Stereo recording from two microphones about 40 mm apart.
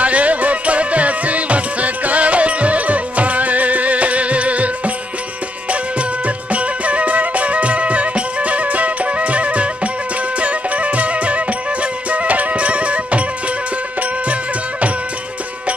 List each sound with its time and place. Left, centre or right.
0.0 s music: right
14.2 s music: right